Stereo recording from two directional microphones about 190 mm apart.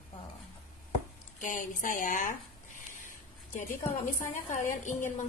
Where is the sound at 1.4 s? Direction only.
45° left (ahead or behind).